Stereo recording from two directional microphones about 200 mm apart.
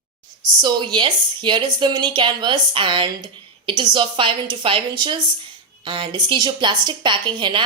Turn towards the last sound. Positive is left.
turn(degrees=-25)  # may be behind; listen again after turning